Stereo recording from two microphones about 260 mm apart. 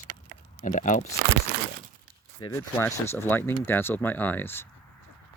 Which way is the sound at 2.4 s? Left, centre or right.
Centre.